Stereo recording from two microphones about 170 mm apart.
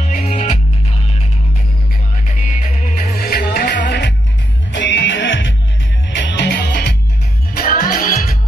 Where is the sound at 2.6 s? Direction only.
45° left (ahead or behind).